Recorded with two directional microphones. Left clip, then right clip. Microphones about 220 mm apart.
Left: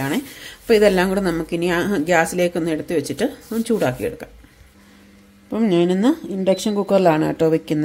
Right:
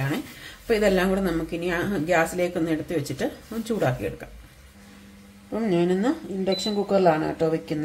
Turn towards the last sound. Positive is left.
turn(degrees=50)  # may be behind; listen again after turning